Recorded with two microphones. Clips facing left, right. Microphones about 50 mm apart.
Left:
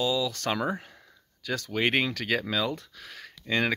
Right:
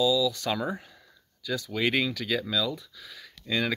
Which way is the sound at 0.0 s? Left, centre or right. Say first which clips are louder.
Right 3 dB; left.